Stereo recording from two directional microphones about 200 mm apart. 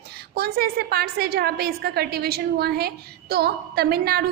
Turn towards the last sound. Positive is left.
turn(degrees=-50)  # may be behind; listen again after turning